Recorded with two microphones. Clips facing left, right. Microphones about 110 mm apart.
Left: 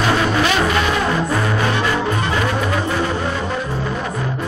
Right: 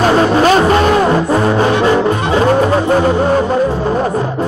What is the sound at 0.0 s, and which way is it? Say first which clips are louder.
Music: right 7 dB; 35° right (ahead or behind).